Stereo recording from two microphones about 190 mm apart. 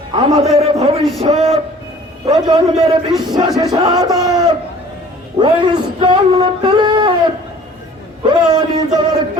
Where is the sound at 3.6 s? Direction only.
20° right (ahead or behind).